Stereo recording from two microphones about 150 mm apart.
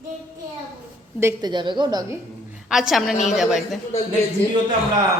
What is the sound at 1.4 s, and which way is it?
Speech, 30° right (ahead or behind).